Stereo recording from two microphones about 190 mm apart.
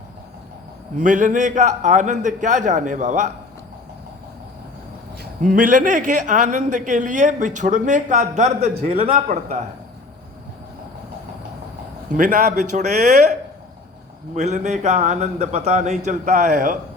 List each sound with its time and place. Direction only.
0.9 s a man's voice: 40° right (ahead or behind)
5.2 s a man's voice: 45° right (ahead or behind)
12.1 s a man's voice: 40° right (ahead or behind)
14.3 s a man's voice: 40° right (ahead or behind)